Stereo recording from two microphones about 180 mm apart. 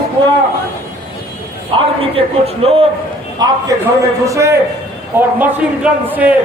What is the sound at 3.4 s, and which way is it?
A man's voice, 20° right (ahead or behind).